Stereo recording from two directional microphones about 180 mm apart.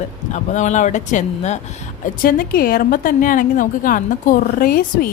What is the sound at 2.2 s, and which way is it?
A woman's voice, 55° left (ahead or behind).